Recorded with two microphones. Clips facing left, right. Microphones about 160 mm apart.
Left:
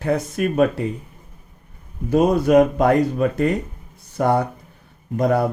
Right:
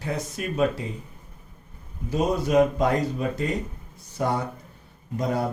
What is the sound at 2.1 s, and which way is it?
Speech, 60° left (ahead or behind).